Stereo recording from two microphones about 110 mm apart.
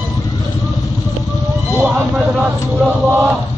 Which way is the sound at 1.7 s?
Centre (ahead or behind).